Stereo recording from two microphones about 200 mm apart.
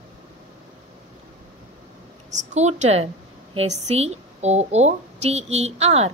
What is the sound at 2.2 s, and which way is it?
A woman's voice, 35° right (ahead or behind).